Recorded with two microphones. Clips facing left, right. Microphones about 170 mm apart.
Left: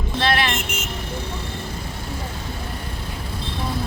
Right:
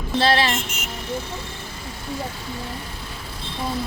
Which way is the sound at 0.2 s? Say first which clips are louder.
Right 2 dB; 30° right (ahead or behind).